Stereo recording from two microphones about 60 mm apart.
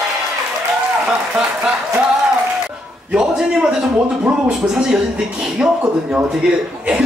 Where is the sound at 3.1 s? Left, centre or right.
Centre.